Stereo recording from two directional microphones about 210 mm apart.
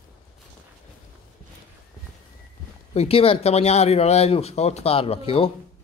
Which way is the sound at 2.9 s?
30° left (ahead or behind).